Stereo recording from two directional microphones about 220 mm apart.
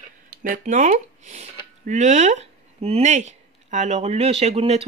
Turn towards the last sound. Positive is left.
turn(degrees=-30)  # may be behind; listen again after turning